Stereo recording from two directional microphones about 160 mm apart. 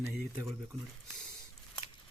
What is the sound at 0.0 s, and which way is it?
Speech, 20° right (ahead or behind).